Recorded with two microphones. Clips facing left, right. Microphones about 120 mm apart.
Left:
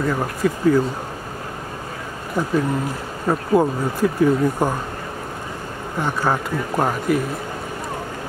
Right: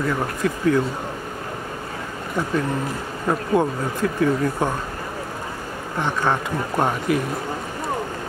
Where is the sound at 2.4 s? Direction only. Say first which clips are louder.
Left 3 dB; 10° left (ahead or behind).